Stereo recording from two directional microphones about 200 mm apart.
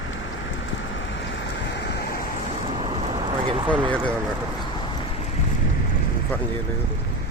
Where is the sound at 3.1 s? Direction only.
25° right (ahead or behind).